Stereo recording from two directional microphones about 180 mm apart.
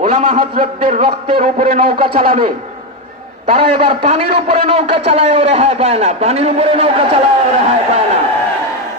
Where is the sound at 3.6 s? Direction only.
30° right (ahead or behind).